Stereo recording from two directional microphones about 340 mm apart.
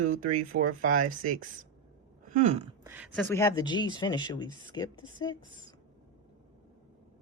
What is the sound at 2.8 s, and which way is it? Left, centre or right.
Speech, centre.